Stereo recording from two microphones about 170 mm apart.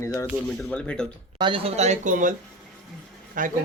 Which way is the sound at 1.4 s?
30° right (ahead or behind).